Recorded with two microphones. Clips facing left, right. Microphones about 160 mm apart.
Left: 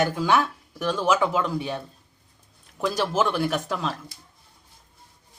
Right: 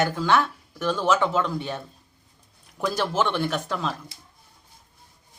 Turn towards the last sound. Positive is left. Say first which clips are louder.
# left 1 dB
turn(degrees=5)  # may be behind; listen again after turning